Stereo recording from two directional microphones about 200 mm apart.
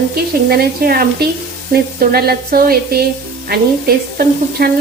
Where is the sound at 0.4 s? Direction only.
50° right (ahead or behind).